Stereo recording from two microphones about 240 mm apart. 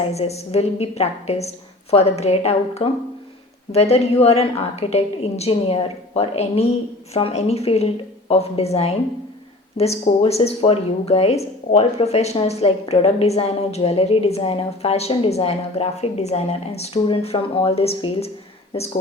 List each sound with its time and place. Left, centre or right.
0.1 s a woman's voice: left